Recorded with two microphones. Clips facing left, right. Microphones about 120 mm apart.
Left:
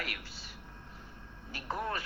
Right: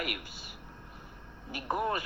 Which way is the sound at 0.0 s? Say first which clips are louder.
Right 5 dB; 15° right (ahead or behind).